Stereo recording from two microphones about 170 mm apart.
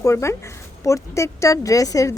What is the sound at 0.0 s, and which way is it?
Speech, 15° left (ahead or behind).